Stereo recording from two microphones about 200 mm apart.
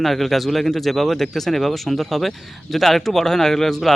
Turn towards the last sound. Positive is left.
turn(degrees=0)  # may be behind; listen again after turning